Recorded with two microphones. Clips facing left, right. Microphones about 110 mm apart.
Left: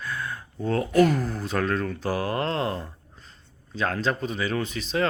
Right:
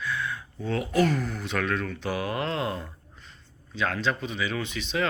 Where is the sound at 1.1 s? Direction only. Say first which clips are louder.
Left 3 dB; 35° left (ahead or behind).